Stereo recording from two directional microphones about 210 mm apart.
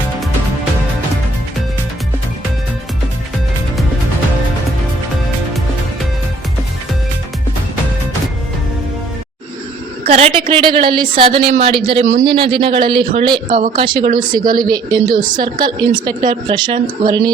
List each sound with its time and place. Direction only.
10.1 s a woman's voice: 30° right (ahead or behind)